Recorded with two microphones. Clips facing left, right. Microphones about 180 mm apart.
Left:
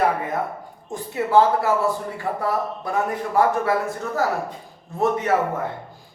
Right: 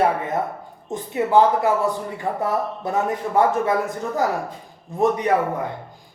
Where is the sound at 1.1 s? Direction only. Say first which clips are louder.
Right 1 dB; 20° right (ahead or behind).